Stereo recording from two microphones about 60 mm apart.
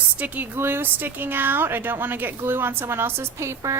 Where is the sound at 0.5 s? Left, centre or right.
Right.